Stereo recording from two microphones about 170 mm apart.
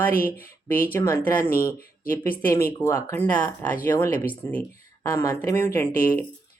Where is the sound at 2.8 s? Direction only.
15° left (ahead or behind).